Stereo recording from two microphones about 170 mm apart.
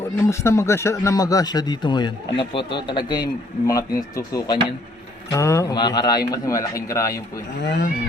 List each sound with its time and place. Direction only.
0.2 s speech: 15° left (ahead or behind)
7.6 s speech: 90° left